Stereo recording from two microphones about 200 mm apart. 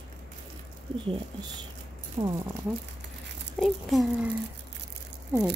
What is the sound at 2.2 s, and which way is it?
Speech, 20° right (ahead or behind).